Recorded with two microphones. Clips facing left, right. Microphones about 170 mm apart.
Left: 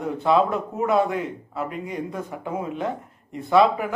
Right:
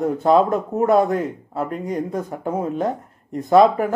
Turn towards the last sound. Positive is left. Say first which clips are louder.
# right 4 dB
turn(degrees=-40)  # may be behind; listen again after turning